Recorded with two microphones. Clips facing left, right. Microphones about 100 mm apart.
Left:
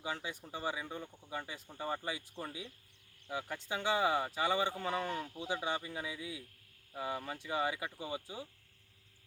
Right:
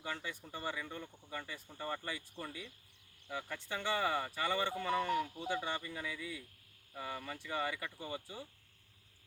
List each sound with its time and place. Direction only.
0.0 s speech: 15° left (ahead or behind)